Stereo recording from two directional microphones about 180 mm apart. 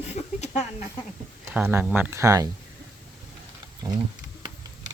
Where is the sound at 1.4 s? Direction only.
10° right (ahead or behind).